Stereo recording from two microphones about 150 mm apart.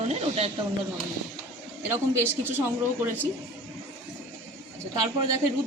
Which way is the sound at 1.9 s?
15° right (ahead or behind).